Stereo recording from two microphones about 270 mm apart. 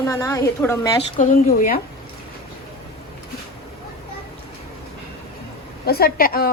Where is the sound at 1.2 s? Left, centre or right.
Left.